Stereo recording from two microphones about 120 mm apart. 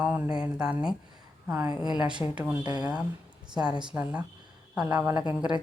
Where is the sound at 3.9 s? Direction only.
10° right (ahead or behind).